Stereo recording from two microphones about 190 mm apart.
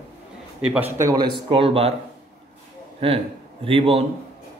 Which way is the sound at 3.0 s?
30° right (ahead or behind).